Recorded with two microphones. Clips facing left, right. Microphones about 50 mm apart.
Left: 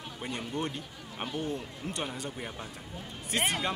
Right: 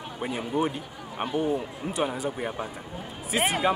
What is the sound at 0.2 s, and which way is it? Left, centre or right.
Speech, centre.